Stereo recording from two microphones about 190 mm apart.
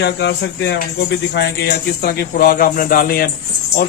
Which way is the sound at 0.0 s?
60° left (ahead or behind).